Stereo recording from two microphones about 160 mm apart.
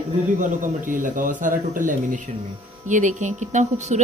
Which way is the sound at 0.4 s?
55° right (ahead or behind).